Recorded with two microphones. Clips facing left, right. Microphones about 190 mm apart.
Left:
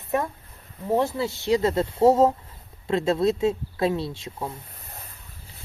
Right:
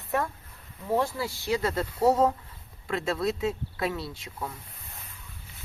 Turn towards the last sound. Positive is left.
turn(degrees=25)  # may be behind; listen again after turning